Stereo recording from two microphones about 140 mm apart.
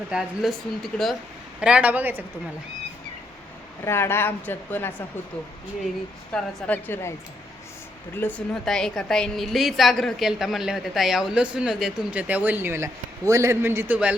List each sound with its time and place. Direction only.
0.1 s a woman's voice: centre (ahead or behind)
3.8 s speech: 15° left (ahead or behind)
6.3 s speech: 10° left (ahead or behind)
8.2 s speech: 15° left (ahead or behind)
8.6 s a woman's voice: 5° left (ahead or behind)